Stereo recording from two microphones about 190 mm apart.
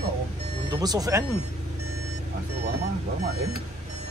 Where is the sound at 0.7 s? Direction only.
20° right (ahead or behind).